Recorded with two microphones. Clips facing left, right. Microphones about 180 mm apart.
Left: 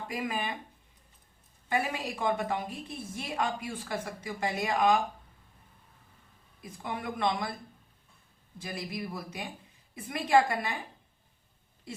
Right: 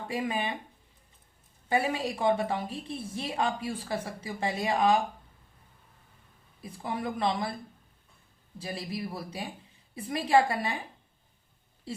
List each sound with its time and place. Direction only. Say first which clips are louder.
0.1 s speech: right 3 dB; 30° right (ahead or behind)
1.7 s a woman's voice: right 3 dB; 30° right (ahead or behind)
6.6 s a woman's voice: right 3 dB; 30° right (ahead or behind)
8.5 s a woman's voice: right 2 dB; 30° right (ahead or behind)